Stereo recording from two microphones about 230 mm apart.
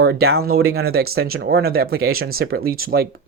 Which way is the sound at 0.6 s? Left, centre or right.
Right.